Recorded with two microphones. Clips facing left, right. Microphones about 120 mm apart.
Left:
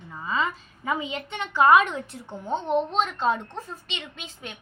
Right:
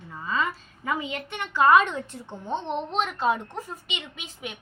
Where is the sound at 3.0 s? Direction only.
5° right (ahead or behind).